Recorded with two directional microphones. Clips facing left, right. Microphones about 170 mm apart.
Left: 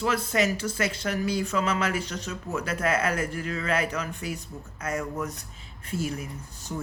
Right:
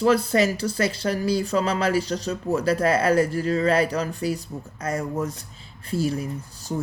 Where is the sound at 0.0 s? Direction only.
35° right (ahead or behind).